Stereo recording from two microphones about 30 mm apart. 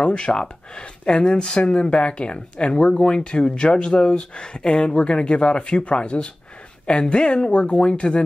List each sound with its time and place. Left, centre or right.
0.0 s speech: left
7.5 s speech: left